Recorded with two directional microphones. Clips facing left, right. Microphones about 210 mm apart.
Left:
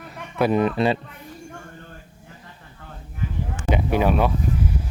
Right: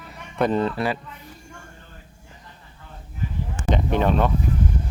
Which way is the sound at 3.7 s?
10° left (ahead or behind).